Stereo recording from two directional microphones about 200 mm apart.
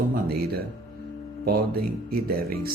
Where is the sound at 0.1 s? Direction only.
50° right (ahead or behind).